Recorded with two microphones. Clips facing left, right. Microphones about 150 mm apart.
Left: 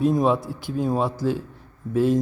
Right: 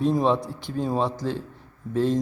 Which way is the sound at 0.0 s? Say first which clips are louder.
Left 2 dB; 5° left (ahead or behind).